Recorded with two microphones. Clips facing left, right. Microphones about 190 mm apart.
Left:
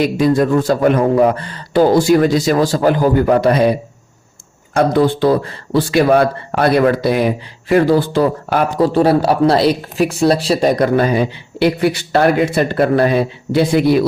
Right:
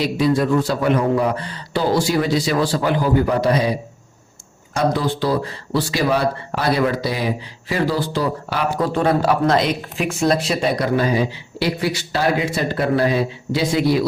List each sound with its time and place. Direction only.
0.0 s a man's voice: 50° left (ahead or behind)
8.8 s speech: 35° left (ahead or behind); by 14.1 s 60° left (ahead or behind)